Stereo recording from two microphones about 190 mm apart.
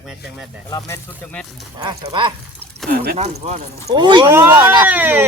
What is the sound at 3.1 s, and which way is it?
Speech, 35° right (ahead or behind).